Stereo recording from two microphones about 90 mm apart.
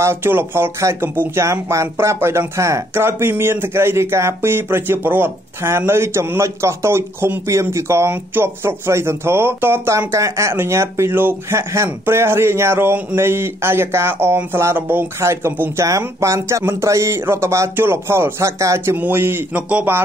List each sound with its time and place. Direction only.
0.0 s speech: 25° right (ahead or behind)
1.4 s speech: 35° right (ahead or behind)
18.9 s speech: 20° right (ahead or behind)